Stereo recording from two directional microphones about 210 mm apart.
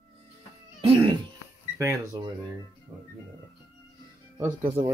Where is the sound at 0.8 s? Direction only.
25° right (ahead or behind).